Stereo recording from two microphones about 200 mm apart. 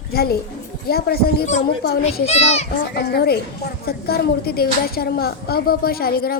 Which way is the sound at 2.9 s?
50° left (ahead or behind).